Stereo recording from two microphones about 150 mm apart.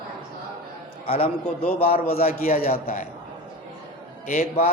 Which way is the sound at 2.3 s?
85° left.